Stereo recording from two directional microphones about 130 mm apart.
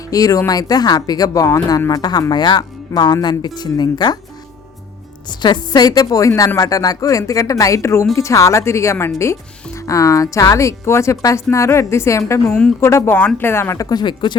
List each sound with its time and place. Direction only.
0.1 s speech: 25° left (ahead or behind)
5.3 s a woman's voice: 35° left (ahead or behind); by 13.8 s 20° left (ahead or behind)
13.9 s speech: 35° left (ahead or behind)